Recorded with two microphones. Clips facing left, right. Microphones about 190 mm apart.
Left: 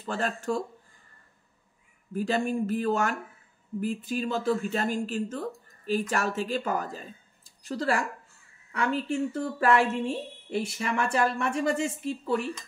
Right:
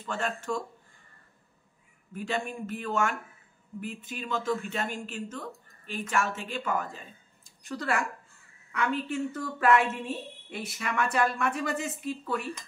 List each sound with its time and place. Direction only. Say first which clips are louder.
0.0 s speech: left 3 dB; 35° left (ahead or behind)
2.1 s a woman's voice: left 6 dB; 35° left (ahead or behind)